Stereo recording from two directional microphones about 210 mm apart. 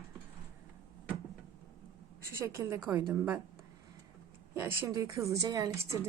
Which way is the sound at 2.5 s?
10° right (ahead or behind).